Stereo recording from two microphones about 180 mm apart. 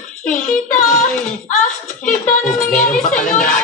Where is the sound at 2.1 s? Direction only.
50° left (ahead or behind).